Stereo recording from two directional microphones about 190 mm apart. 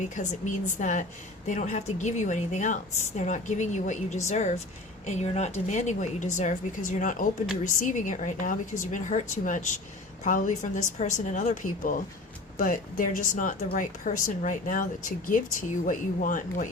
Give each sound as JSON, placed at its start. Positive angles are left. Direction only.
{"t": 0.0, "sound": "speech", "side_deg": 40}